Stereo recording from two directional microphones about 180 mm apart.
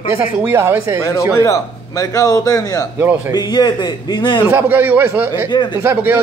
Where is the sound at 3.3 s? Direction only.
20° left (ahead or behind).